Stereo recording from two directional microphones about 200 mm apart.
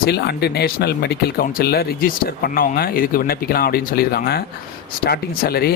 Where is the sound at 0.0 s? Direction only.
55° left (ahead or behind).